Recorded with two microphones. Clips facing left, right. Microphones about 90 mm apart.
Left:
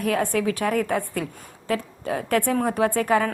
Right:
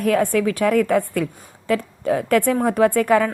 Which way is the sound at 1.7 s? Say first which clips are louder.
Right 6 dB; 40° right (ahead or behind).